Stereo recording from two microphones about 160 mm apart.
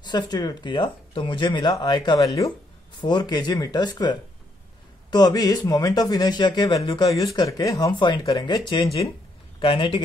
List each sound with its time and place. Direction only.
0.0 s a man's voice: 25° left (ahead or behind)